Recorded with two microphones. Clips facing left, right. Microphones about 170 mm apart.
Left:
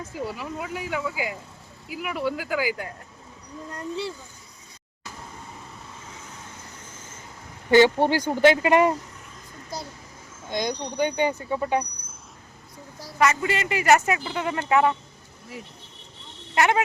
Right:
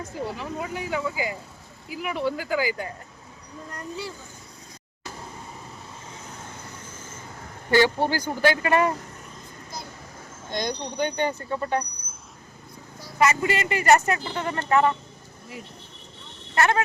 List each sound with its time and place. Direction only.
0.3 s speech: 5° left (ahead or behind)
7.7 s speech: 20° left (ahead or behind)
10.5 s speech: 10° left (ahead or behind)
16.6 s speech: 15° left (ahead or behind)